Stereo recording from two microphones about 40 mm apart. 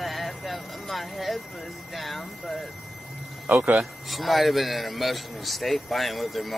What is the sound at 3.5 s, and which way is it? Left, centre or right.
Speech, right.